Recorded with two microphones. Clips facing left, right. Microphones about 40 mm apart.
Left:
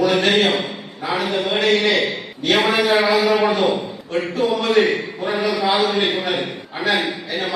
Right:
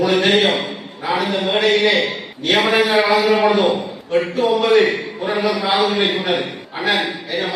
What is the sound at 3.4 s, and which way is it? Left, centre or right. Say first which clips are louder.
A man's voice: right 2 dB; centre.